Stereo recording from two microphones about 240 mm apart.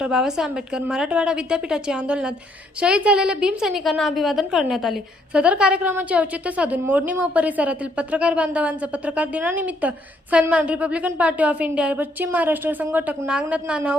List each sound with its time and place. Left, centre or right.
0.0 s a woman's voice: centre